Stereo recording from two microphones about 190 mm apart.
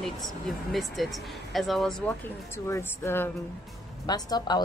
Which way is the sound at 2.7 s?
10° left (ahead or behind).